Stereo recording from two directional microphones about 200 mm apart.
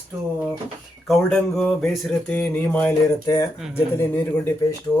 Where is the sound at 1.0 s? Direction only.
Centre (ahead or behind).